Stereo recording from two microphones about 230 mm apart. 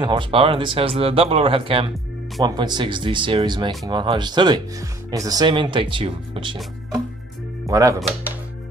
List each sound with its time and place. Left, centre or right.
0.0 s speech: right